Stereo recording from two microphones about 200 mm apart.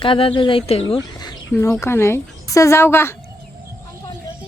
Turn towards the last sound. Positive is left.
turn(degrees=10)  # may be behind; listen again after turning